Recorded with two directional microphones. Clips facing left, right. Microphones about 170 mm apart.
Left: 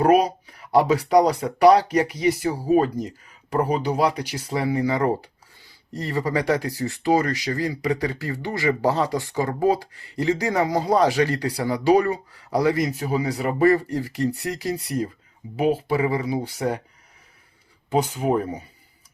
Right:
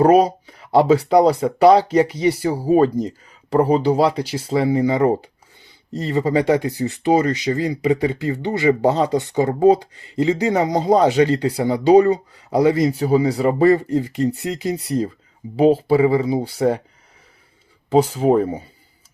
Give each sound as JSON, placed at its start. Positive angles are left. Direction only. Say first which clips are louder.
{"t": 0.0, "sound": "speech", "louder": "right 4 dB", "side_deg": -30}
{"t": 17.9, "sound": "speech", "louder": "right 6 dB", "side_deg": -30}